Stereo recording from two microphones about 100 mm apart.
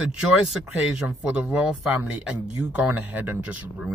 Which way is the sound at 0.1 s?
5° right (ahead or behind).